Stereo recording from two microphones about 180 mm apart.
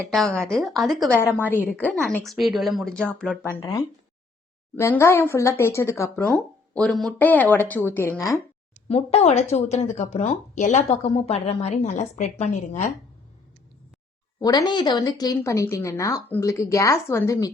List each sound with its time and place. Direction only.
0.3 s a woman's voice: 5° left (ahead or behind)
3.6 s speech: 20° left (ahead or behind)
8.9 s speech: 35° left (ahead or behind)
14.3 s speech: 20° left (ahead or behind)